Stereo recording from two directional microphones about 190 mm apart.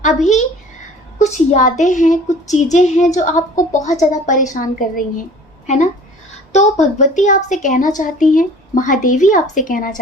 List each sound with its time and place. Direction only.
0.2 s a woman's voice: 40° left (ahead or behind)